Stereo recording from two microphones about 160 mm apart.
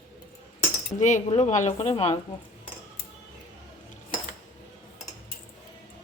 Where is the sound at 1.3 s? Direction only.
50° left (ahead or behind).